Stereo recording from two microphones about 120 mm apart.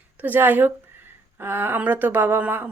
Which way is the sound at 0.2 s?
15° right (ahead or behind).